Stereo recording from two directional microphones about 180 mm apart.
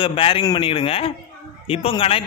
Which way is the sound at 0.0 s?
30° left (ahead or behind).